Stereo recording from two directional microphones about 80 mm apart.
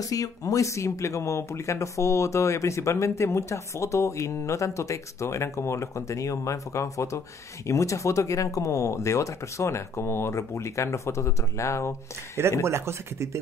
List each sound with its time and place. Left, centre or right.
0.0 s speech: left
12.6 s speech: right